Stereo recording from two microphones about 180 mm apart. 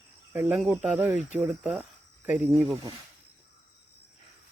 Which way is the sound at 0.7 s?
5° right (ahead or behind).